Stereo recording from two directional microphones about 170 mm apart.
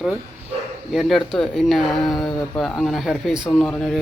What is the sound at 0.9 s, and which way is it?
Speech, centre (ahead or behind).